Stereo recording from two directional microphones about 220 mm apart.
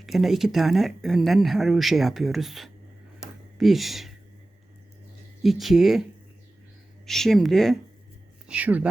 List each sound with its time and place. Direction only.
0.0 s speech: centre (ahead or behind)
3.2 s a sound: centre (ahead or behind)
5.4 s speech: centre (ahead or behind)